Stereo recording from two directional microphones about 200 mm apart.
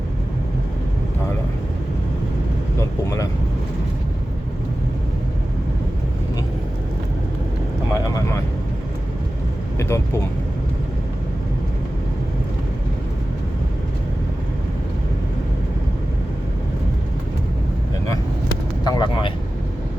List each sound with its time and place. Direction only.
7.9 s vehicle: 15° left (ahead or behind)
9.7 s vehicle: 15° left (ahead or behind)
18.9 s vehicle: 20° left (ahead or behind)